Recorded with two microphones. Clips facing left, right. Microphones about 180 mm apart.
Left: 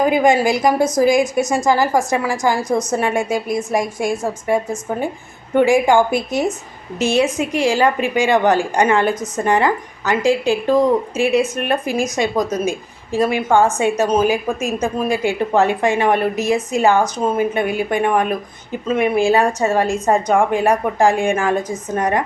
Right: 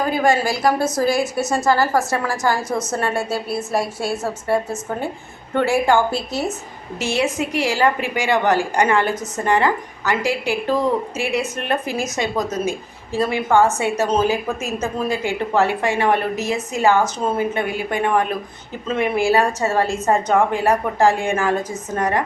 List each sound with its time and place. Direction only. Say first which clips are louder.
0.0 s a woman's voice: left 4 dB; 15° left (ahead or behind)